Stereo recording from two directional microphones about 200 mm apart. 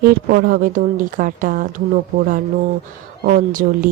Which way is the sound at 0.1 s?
50° right (ahead or behind).